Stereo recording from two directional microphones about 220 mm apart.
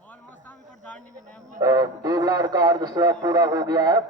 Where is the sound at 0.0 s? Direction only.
5° left (ahead or behind).